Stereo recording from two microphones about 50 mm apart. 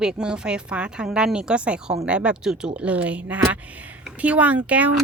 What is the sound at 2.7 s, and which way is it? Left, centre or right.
A woman's voice, right.